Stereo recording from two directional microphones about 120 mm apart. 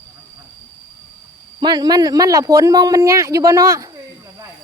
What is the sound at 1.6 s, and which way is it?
A man's voice, 35° right (ahead or behind).